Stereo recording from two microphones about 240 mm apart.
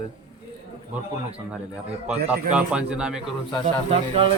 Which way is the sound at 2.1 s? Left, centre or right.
Centre.